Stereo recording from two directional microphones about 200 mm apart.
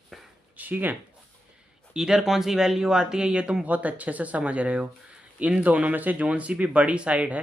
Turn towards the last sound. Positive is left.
turn(degrees=-5)  # may be behind; listen again after turning